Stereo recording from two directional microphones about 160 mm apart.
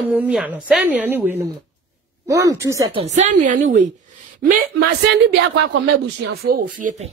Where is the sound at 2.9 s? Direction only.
45° right (ahead or behind).